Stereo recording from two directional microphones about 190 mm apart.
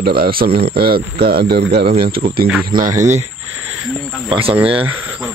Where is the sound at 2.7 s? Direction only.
20° right (ahead or behind).